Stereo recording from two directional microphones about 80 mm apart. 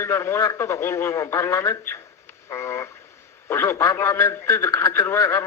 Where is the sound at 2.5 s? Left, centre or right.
Left.